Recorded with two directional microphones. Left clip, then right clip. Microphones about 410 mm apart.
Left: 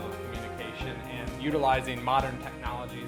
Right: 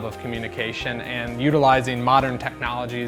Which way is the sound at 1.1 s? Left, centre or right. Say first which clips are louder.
Right 9 dB; right.